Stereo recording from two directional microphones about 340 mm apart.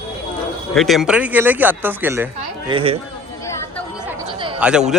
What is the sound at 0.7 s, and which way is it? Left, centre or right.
A woman's voice, centre.